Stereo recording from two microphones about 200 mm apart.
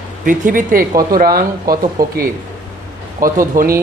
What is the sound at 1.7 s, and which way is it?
Speech, 15° right (ahead or behind).